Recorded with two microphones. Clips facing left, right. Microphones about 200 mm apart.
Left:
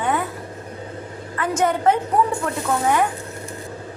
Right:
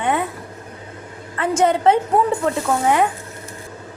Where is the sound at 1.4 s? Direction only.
25° right (ahead or behind).